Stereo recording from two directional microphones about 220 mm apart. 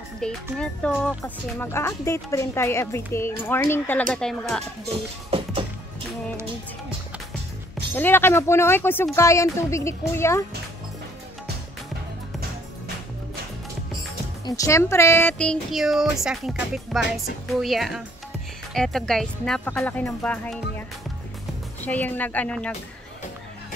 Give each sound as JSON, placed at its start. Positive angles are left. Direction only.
{"t": 0.2, "sound": "speech", "side_deg": 5}
{"t": 5.3, "sound": "music", "side_deg": -25}
{"t": 7.9, "sound": "speech", "side_deg": 10}
{"t": 14.4, "sound": "speech", "side_deg": 15}
{"t": 21.8, "sound": "speech", "side_deg": 5}